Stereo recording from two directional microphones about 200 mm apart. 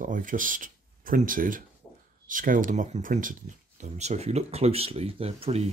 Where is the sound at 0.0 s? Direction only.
40° right (ahead or behind).